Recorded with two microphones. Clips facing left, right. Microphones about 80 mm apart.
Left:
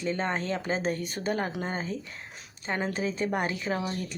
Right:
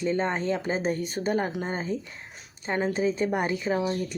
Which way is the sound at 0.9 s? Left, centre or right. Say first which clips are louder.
Right 3 dB; right.